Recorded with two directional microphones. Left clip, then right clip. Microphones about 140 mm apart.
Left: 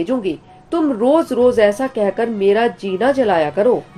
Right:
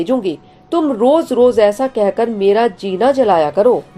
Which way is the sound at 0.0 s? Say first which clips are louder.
Right 3 dB; 40° right (ahead or behind).